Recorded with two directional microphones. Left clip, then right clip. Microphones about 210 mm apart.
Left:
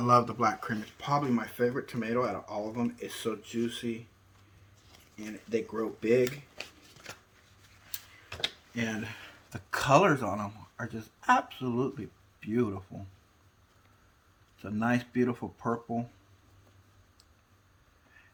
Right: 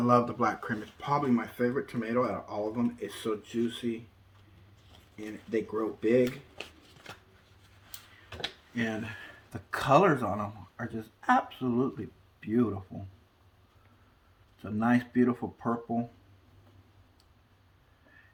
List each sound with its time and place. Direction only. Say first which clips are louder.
0.0 s speech: left 1 dB; 45° left (ahead or behind)
4.9 s speech: right 2 dB; 30° left (ahead or behind)
14.6 s speech: right 2 dB; 25° left (ahead or behind)